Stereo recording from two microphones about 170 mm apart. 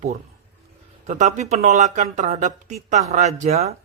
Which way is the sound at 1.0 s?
45° right (ahead or behind).